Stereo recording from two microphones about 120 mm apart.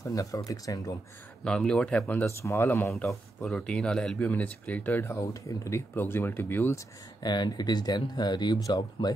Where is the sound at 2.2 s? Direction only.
25° left (ahead or behind).